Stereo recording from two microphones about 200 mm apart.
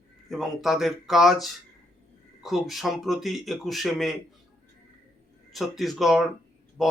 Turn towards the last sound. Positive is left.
turn(degrees=0)  # may be behind; listen again after turning